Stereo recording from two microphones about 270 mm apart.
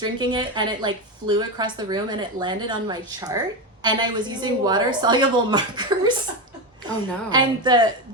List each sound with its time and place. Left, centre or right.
0.0 s a woman's voice: centre
7.3 s a woman's voice: centre